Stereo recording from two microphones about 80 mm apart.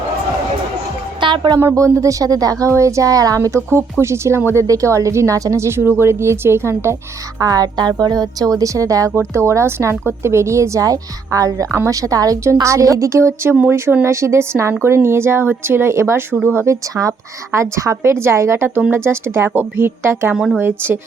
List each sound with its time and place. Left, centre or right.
1.2 s speech: right
1.5 s a woman's voice: right
4.6 s a woman's voice: right
7.3 s a woman's voice: right
16.9 s a woman's voice: right
20.3 s a woman's voice: centre
20.6 s speech: right